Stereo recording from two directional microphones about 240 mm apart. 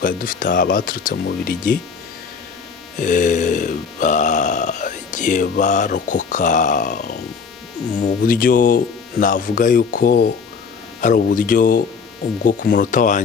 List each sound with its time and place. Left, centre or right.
0.0 s burping: left
3.0 s burping: left